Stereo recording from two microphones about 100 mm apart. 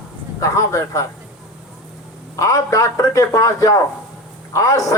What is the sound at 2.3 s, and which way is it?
A man's voice, 35° left (ahead or behind).